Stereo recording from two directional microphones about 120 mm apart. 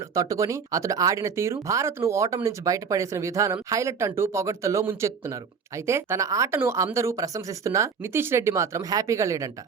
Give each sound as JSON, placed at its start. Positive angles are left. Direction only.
{"t": 0.1, "sound": "speech", "side_deg": -30}